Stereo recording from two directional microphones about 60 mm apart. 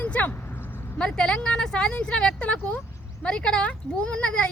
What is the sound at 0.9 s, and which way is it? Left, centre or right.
A woman's voice, centre.